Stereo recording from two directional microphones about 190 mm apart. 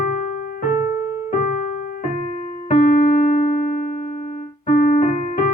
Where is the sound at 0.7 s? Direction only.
15° right (ahead or behind).